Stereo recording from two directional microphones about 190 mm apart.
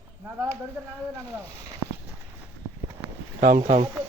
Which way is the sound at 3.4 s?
40° right (ahead or behind).